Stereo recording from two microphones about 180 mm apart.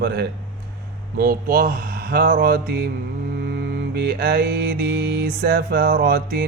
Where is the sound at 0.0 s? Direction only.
65° right (ahead or behind).